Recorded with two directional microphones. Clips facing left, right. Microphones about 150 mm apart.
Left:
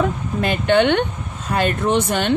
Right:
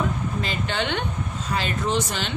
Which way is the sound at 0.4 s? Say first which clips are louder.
Left 14 dB; 60° left (ahead or behind).